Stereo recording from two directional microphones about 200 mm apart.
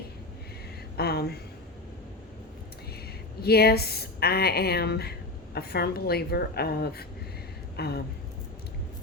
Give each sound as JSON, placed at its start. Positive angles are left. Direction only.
{"t": 0.9, "sound": "a woman's voice", "side_deg": 50}
{"t": 3.4, "sound": "a woman's voice", "side_deg": 50}